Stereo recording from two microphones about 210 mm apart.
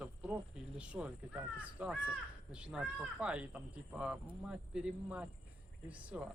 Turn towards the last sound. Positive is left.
turn(degrees=-5)  # may be behind; listen again after turning